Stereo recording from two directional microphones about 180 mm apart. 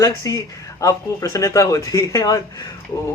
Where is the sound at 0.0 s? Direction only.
20° left (ahead or behind).